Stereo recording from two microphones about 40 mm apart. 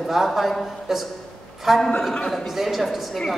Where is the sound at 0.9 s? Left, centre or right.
Centre.